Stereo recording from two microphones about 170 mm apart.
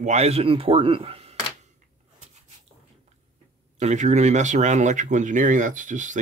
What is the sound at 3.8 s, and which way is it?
Speech, 45° right (ahead or behind).